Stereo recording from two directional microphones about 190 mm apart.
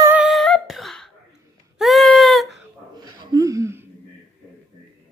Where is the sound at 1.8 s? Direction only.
Centre (ahead or behind).